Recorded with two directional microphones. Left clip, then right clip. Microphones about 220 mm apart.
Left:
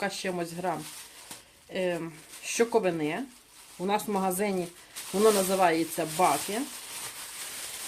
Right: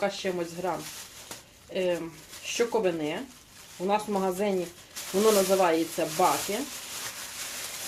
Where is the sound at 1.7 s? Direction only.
40° left (ahead or behind).